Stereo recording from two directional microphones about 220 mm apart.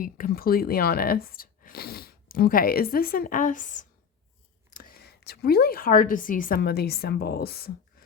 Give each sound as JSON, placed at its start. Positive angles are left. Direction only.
{"t": 0.0, "sound": "a woman's voice", "side_deg": 40}